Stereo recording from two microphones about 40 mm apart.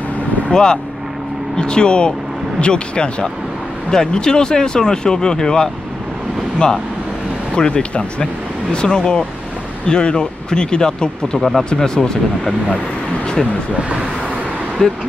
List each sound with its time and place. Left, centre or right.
0.5 s speech: left
7.5 s speech: left
14.8 s speech: centre